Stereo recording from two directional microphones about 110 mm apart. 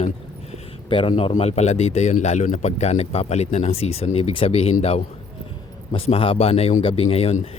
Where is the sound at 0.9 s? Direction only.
50° left (ahead or behind).